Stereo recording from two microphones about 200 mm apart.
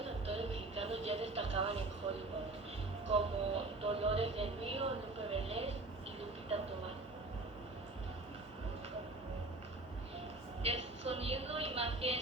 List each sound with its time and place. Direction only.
0.0 s music: 30° right (ahead or behind)
2.0 s vehicle: 25° right (ahead or behind)
3.1 s music: 30° right (ahead or behind)
10.6 s music: 30° right (ahead or behind)